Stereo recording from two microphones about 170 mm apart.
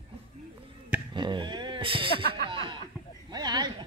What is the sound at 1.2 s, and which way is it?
Speech, 25° right (ahead or behind).